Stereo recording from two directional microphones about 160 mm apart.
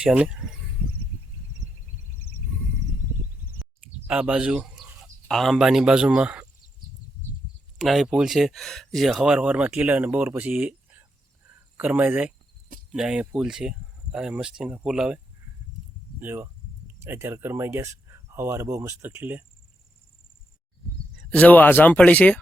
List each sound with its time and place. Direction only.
0.0 s speech: 5° right (ahead or behind)
3.6 s a sound: 5° right (ahead or behind)
4.1 s speech: 5° right (ahead or behind)
7.8 s speech: 5° right (ahead or behind)
16.2 s speech: 15° right (ahead or behind)
21.3 s speech: 10° left (ahead or behind)